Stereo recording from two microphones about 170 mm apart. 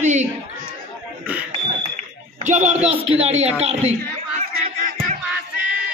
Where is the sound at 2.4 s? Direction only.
45° right (ahead or behind).